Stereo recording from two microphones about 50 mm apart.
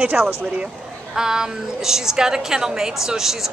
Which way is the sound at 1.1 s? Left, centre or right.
Centre.